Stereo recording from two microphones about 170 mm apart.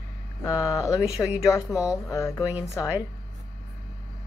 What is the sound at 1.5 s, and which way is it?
Speech, 20° left (ahead or behind).